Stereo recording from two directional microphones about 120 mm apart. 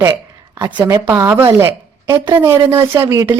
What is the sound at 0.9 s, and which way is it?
A woman's voice, 20° right (ahead or behind).